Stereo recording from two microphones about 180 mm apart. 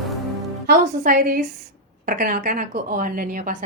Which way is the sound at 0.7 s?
50° right (ahead or behind).